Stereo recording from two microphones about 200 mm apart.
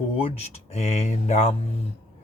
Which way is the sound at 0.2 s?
30° left (ahead or behind).